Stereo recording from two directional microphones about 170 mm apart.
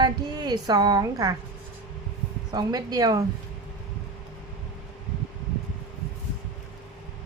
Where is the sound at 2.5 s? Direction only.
20° right (ahead or behind).